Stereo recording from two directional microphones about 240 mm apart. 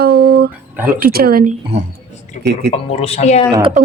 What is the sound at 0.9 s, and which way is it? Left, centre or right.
Speech, right.